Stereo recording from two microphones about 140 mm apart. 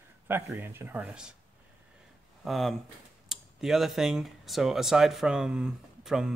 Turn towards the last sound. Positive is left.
turn(degrees=-5)  # may be behind; listen again after turning